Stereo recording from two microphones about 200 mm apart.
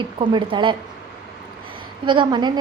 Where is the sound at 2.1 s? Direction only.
25° right (ahead or behind).